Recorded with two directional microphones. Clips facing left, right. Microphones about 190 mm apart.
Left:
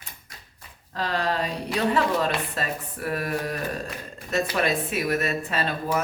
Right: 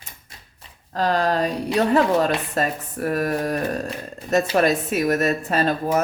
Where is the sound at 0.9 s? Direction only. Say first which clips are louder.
Right 6 dB; 45° right (ahead or behind).